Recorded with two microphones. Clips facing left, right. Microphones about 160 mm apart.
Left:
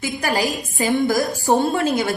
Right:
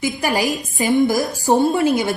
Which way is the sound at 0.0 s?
15° right (ahead or behind).